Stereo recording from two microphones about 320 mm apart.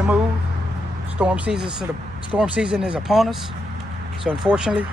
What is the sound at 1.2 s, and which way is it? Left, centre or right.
Speech, centre.